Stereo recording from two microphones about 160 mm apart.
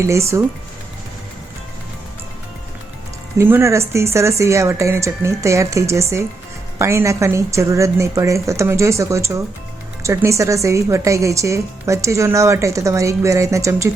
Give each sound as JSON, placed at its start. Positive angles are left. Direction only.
{"t": 0.0, "sound": "speech", "side_deg": -20}
{"t": 3.3, "sound": "a woman's voice", "side_deg": -15}